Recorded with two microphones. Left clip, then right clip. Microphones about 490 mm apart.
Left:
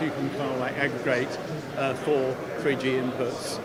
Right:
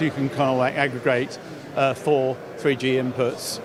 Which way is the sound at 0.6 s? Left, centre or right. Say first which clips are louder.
Right 5 dB; right.